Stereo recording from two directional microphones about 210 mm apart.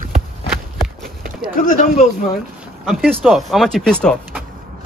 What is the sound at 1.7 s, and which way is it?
Speech, 35° left (ahead or behind).